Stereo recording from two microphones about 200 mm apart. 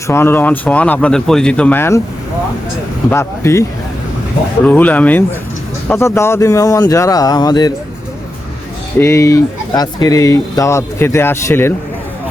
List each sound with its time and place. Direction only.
0.1 s speech: 10° left (ahead or behind)
3.1 s speech: 15° left (ahead or behind)
9.0 s speech: 15° left (ahead or behind)